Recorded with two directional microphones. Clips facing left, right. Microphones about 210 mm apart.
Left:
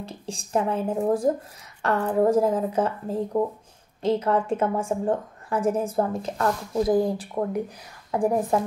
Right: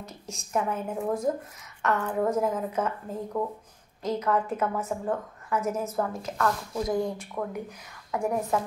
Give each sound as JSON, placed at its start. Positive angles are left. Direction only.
{"t": 0.0, "sound": "a woman's voice", "side_deg": 30}